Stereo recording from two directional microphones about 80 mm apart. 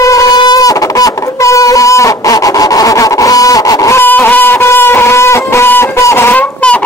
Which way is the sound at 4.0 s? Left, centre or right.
Left.